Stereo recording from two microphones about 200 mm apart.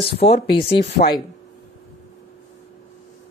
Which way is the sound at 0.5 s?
55° left (ahead or behind).